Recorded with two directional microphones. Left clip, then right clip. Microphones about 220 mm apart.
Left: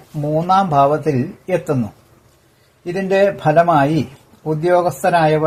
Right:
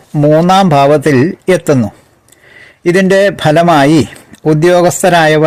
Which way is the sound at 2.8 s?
50° right (ahead or behind).